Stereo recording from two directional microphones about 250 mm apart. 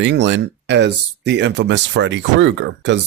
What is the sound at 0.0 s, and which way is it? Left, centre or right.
Speech, right.